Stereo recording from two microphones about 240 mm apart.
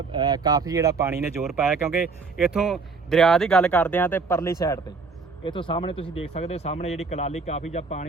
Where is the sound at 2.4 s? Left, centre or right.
Centre.